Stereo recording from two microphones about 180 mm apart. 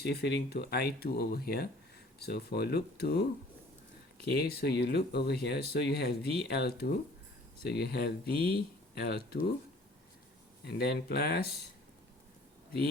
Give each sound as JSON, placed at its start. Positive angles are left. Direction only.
{"t": 0.0, "sound": "speech", "side_deg": 65}
{"t": 4.3, "sound": "speech", "side_deg": 60}
{"t": 10.7, "sound": "speech", "side_deg": 60}